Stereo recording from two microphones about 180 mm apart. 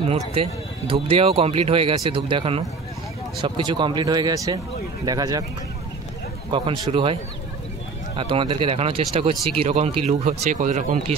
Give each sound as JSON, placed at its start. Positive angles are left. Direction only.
{"t": 0.0, "sound": "speech", "side_deg": -30}
{"t": 6.5, "sound": "speech", "side_deg": -25}
{"t": 8.2, "sound": "speech", "side_deg": -30}